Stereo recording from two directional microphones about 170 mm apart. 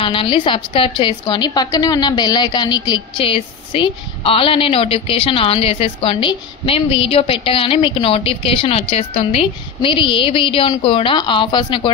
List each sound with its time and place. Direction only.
0.0 s a woman's voice: 30° left (ahead or behind)